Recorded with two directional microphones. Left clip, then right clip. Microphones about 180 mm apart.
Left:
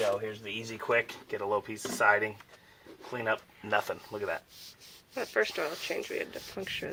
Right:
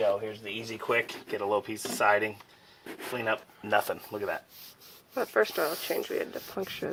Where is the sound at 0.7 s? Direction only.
25° right (ahead or behind).